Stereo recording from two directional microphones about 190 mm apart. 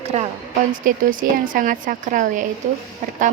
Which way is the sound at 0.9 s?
45° right (ahead or behind).